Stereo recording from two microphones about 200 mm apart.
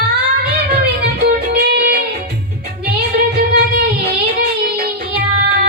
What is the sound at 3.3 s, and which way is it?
Music, 55° right (ahead or behind).